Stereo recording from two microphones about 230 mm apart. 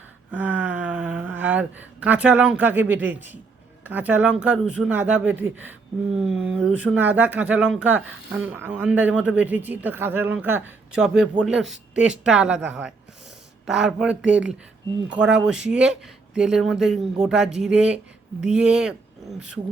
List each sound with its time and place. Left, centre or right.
0.3 s speech: centre